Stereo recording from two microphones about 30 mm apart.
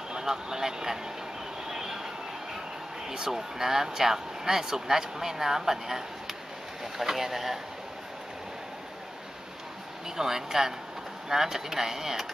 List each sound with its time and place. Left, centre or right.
0.2 s speech: centre
1.7 s vehicle: centre
3.1 s speech: centre
10.0 s speech: centre